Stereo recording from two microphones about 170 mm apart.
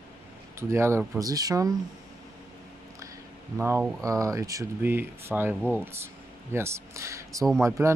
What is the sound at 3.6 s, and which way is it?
Speech, 10° right (ahead or behind).